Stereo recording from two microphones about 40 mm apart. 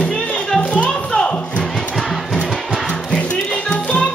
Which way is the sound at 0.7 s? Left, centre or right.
Left.